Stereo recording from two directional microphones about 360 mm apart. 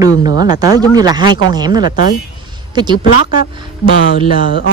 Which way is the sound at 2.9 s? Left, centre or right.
Left.